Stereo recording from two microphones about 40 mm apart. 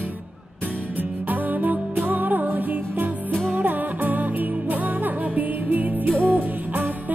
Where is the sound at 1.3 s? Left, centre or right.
Right.